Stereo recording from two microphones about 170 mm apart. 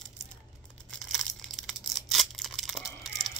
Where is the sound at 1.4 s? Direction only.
Centre (ahead or behind).